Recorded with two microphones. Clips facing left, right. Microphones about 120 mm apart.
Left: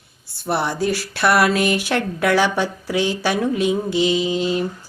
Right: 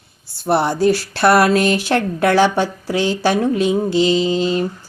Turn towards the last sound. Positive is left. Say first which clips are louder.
# right 3 dB
turn(degrees=-30)  # may be behind; listen again after turning